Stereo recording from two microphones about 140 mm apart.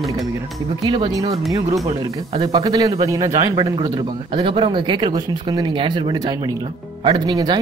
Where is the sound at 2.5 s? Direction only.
30° right (ahead or behind).